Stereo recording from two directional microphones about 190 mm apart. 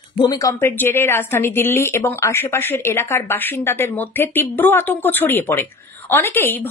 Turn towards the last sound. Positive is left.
turn(degrees=10)  # may be behind; listen again after turning